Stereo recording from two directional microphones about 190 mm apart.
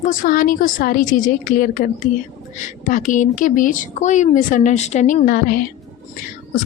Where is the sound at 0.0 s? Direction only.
45° left (ahead or behind).